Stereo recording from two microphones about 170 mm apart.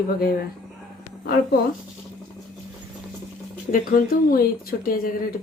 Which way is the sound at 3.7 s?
55° left (ahead or behind).